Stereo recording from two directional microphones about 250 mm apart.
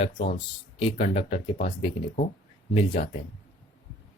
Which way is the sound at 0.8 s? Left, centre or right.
Left.